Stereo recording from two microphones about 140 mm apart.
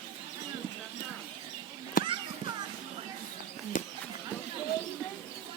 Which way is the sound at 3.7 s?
65° left (ahead or behind).